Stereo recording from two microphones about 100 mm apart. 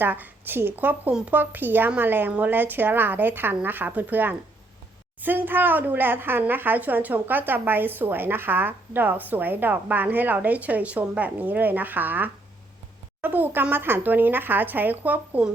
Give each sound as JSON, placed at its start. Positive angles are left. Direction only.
{"t": 0.0, "sound": "a woman's voice", "side_deg": -20}